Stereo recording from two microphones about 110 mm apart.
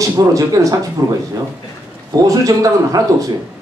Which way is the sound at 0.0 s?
30° right (ahead or behind).